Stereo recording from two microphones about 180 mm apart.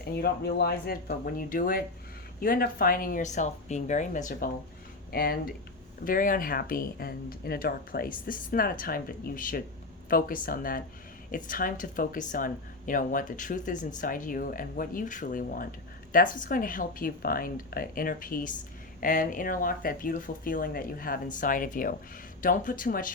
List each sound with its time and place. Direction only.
0.0 s speech: 60° left (ahead or behind)
5.1 s speech: 60° left (ahead or behind)